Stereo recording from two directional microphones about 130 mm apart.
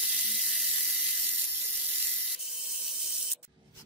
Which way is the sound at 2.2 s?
Centre (ahead or behind).